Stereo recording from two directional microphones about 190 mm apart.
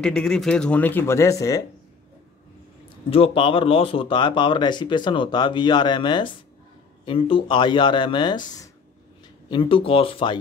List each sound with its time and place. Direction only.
0.0 s speech: 5° left (ahead or behind)
3.1 s speech: 30° left (ahead or behind)